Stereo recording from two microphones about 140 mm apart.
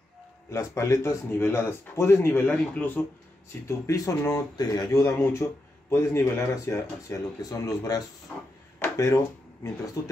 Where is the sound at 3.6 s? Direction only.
20° left (ahead or behind).